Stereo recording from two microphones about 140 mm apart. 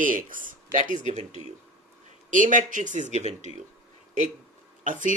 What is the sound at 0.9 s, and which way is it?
Speech, 60° right (ahead or behind).